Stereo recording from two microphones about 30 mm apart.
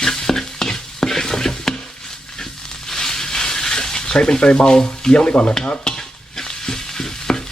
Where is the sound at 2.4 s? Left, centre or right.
Centre; by 5.6 s left.